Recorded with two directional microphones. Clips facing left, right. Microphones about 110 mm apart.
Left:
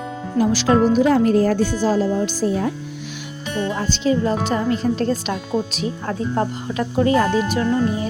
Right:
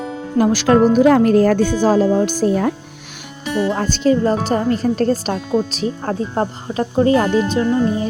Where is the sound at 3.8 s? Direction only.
45° right (ahead or behind).